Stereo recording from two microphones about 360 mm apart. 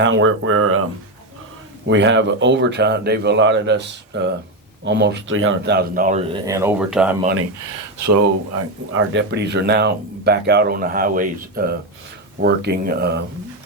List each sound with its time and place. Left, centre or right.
0.0 s speech: right
1.9 s speech: right; by 7.2 s centre
7.9 s speech: right
8.9 s speech: right